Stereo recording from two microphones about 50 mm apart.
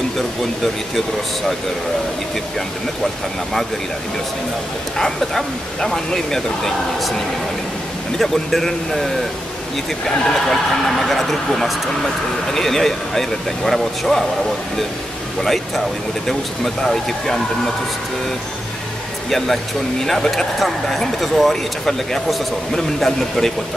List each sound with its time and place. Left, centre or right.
4.9 s speech: centre
8.2 s speech: centre
15.4 s speech: centre
19.3 s speech: centre